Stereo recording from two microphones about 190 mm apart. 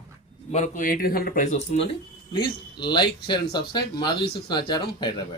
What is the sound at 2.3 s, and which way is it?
Speech, 25° left (ahead or behind).